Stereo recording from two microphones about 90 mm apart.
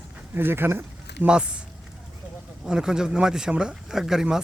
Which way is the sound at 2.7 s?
10° right (ahead or behind).